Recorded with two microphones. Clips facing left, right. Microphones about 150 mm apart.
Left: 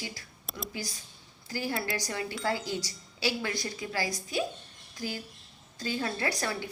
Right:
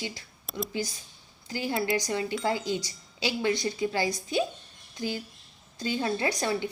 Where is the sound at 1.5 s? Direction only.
20° right (ahead or behind).